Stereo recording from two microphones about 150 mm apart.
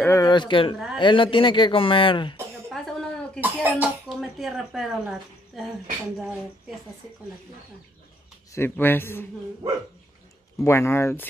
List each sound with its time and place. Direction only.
0.0 s speech: 20° left (ahead or behind)
0.3 s speech: 30° left (ahead or behind)
2.7 s cough: centre (ahead or behind)
3.3 s speech: 10° right (ahead or behind)
4.2 s speech: centre (ahead or behind)
8.5 s speech: 15° left (ahead or behind)
10.6 s speech: 15° left (ahead or behind)